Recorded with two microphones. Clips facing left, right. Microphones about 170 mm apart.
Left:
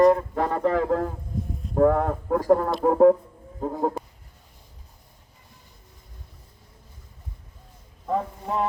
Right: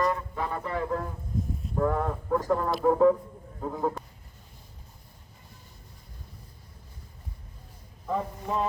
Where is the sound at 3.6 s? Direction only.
40° left (ahead or behind).